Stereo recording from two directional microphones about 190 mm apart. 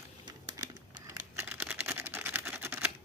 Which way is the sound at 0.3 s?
20° right (ahead or behind).